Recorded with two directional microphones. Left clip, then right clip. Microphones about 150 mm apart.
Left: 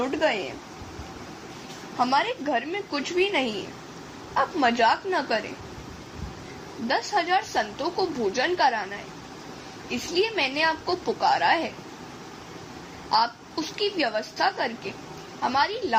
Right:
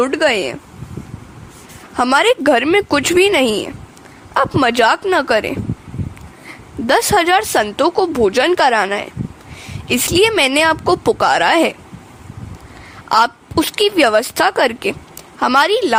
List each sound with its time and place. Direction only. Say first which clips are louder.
0.0 s speech: right 10 dB; 60° right (ahead or behind)
2.0 s a woman's voice: right 11 dB; 70° right (ahead or behind)
6.8 s a woman's voice: right 12 dB; 80° right
10.2 s a woman's voice: right 11 dB; 80° right
13.1 s a woman's voice: right 10 dB; 85° right